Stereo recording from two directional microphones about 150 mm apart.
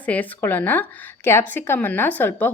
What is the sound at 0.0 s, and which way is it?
A woman's voice, 10° left (ahead or behind).